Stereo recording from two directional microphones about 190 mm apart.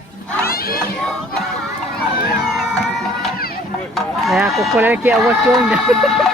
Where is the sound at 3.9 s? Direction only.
Centre (ahead or behind).